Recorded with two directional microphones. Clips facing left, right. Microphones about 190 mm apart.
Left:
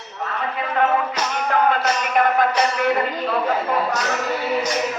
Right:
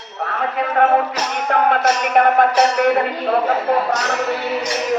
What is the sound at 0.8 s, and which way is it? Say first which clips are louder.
Music: right 4 dB; 50° right (ahead or behind).